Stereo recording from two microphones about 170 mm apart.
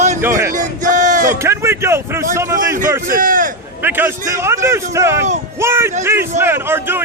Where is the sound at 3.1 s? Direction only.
50° right (ahead or behind).